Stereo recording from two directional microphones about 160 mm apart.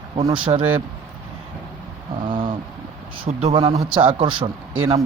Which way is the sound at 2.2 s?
30° right (ahead or behind).